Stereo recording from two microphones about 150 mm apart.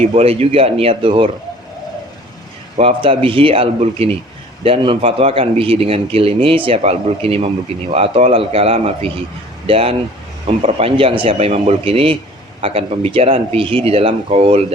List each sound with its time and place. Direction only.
0.0 s a man's voice: 45° right (ahead or behind)
2.7 s a man's voice: 40° right (ahead or behind)